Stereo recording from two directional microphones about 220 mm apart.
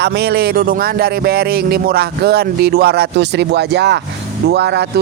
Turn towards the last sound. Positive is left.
turn(degrees=-50)  # may be behind; listen again after turning